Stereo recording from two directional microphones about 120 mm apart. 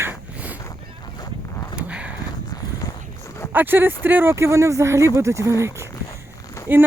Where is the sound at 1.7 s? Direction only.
10° right (ahead or behind).